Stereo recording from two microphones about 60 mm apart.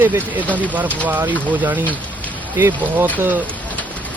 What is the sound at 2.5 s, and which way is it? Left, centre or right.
Speech, right.